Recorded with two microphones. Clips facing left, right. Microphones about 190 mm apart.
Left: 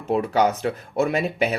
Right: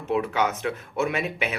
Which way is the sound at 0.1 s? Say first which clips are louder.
Left 4 dB; 35° left (ahead or behind).